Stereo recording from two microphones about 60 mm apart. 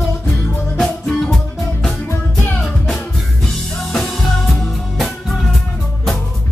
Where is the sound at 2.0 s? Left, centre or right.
Left.